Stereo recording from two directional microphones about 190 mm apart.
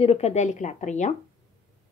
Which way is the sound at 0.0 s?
35° left (ahead or behind).